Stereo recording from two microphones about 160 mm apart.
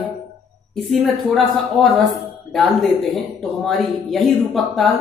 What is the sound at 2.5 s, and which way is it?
Speech, centre (ahead or behind).